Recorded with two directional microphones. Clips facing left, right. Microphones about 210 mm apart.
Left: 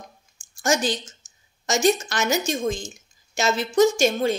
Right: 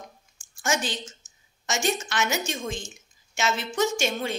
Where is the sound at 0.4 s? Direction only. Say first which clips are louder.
Left 5 dB; 40° left (ahead or behind).